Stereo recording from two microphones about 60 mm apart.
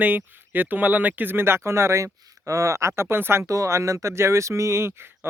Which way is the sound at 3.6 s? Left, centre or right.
Right.